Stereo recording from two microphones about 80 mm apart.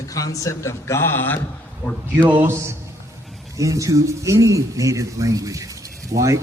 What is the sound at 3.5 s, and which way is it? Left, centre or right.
A man's voice, right.